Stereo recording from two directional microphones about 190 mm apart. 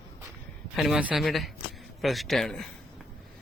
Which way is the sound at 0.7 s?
Centre (ahead or behind).